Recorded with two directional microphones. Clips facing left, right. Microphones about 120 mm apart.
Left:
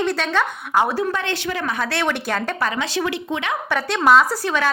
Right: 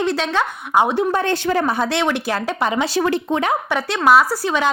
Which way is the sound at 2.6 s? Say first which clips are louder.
Right 4 dB; 25° right (ahead or behind).